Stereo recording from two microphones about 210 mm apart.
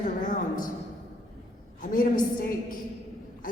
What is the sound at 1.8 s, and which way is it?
Speech, 40° left (ahead or behind).